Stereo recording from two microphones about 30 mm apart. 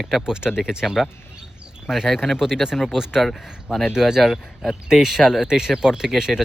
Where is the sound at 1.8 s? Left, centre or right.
Centre.